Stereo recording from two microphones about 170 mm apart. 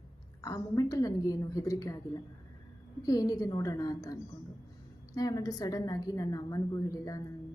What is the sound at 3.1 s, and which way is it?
A woman's voice, 20° left (ahead or behind).